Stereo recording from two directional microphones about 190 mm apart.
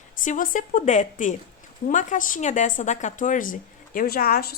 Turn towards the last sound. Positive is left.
turn(degrees=50)  # may be behind; listen again after turning